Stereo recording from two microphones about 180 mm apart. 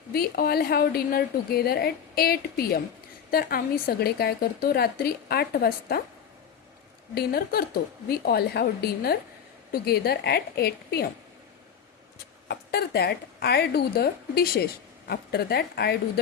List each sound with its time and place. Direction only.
0.1 s speech: 60° left (ahead or behind)
7.1 s speech: 60° left (ahead or behind)
12.5 s speech: 65° left (ahead or behind)